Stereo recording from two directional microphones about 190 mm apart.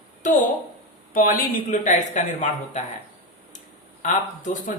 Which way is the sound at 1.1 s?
45° left (ahead or behind).